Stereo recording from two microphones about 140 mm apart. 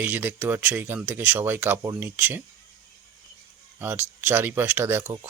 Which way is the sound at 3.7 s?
15° right (ahead or behind).